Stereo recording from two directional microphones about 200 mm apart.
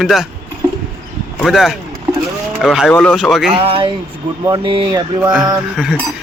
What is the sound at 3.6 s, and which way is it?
Speech, 25° right (ahead or behind).